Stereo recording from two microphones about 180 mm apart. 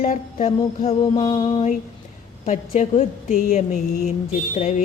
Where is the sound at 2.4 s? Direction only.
45° left (ahead or behind).